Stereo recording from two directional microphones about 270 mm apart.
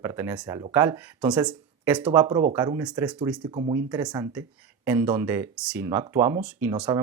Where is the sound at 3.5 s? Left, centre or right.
Centre.